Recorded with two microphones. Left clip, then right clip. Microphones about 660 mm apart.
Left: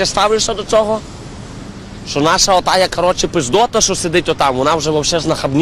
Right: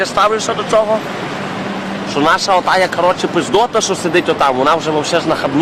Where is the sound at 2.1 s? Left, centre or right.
Left.